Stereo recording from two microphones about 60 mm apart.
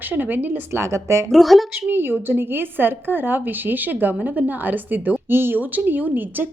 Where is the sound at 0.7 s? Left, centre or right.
Right.